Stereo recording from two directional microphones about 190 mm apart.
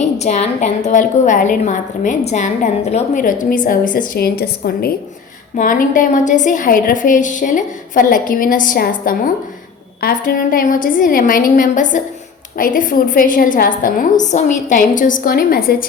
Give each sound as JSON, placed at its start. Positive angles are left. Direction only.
{"t": 0.0, "sound": "a woman's voice", "side_deg": 35}